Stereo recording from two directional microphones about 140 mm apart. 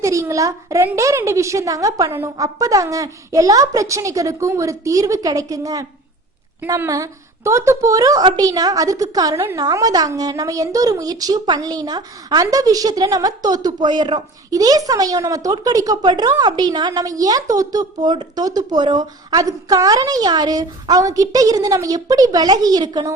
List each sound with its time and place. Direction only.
0.0 s a woman's voice: 20° right (ahead or behind)